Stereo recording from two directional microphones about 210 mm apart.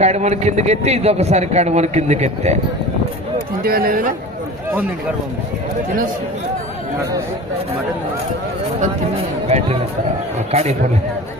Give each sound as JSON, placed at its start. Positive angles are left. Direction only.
{"t": 0.0, "sound": "a man's voice", "side_deg": -35}
{"t": 3.6, "sound": "speech", "side_deg": -45}
{"t": 9.5, "sound": "a man's voice", "side_deg": -30}